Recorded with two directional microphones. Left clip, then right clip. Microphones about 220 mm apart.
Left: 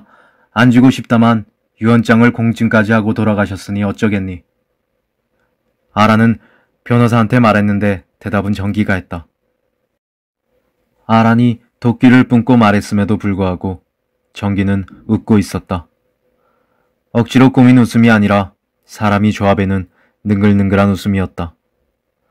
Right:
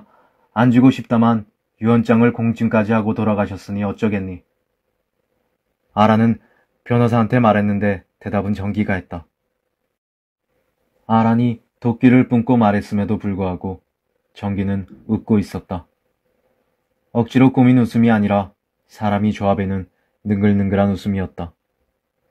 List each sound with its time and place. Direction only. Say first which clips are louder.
0.5 s speech: left 4 dB; 20° left (ahead or behind)
5.9 s speech: left 4 dB; 15° left (ahead or behind)
11.1 s speech: left 5 dB; 20° left (ahead or behind)
17.2 s speech: left 5 dB; 20° left (ahead or behind)